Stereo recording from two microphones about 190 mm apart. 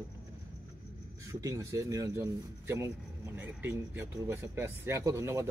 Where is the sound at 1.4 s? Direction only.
15° right (ahead or behind).